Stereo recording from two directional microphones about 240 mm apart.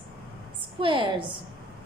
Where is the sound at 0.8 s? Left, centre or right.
Right.